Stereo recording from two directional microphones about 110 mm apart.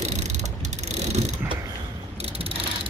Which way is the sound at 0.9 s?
80° right.